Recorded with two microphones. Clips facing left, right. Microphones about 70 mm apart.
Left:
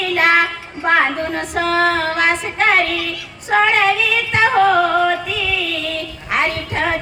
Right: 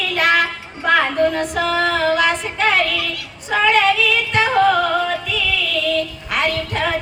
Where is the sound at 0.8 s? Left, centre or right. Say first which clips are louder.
Right 1 dB; left.